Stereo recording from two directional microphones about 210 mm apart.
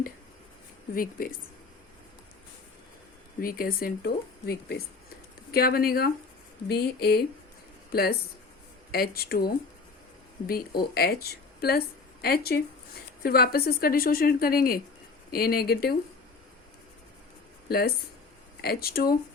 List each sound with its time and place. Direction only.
1.2 s a woman's voice: 45° left (ahead or behind)
3.4 s a woman's voice: 45° left (ahead or behind)
17.7 s a woman's voice: 45° left (ahead or behind)